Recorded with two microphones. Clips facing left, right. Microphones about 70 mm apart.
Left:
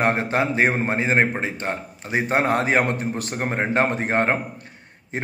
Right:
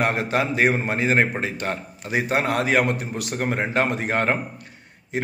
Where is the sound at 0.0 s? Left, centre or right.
Left.